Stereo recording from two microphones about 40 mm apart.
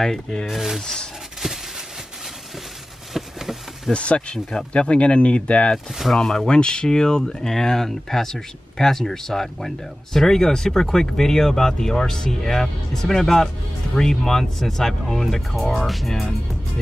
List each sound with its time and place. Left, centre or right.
0.0 s speech: centre
0.5 s speech: centre
1.4 s a sound: centre
3.1 s a sound: centre
3.9 s speech: left
6.1 s speech: centre
16.1 s speech: centre